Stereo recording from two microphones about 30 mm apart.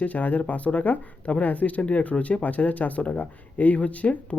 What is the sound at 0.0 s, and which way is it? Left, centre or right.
Speech, left.